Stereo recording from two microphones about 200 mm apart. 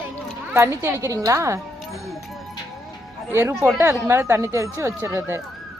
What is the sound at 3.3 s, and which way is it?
Speech, 15° right (ahead or behind).